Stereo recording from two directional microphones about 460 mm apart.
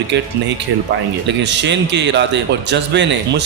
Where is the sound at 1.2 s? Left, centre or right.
Right.